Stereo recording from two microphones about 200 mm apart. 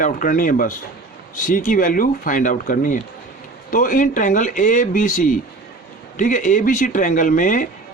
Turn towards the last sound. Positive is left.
turn(degrees=40)  # may be behind; listen again after turning